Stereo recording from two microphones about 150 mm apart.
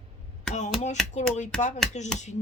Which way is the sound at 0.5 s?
50° left (ahead or behind).